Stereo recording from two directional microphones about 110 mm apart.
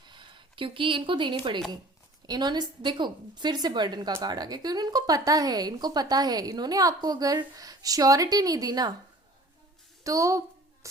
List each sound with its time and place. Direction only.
0.1 s speech: 45° right (ahead or behind)
10.0 s a woman's voice: 30° right (ahead or behind)